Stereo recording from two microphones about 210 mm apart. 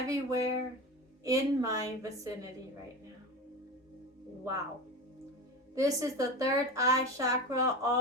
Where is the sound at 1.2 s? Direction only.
15° right (ahead or behind).